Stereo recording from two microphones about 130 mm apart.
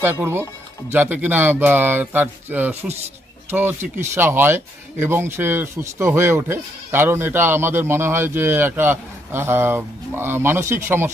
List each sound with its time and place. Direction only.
0.0 s speech: 15° right (ahead or behind)